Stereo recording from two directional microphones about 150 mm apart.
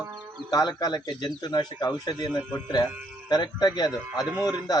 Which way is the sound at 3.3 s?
25° left (ahead or behind).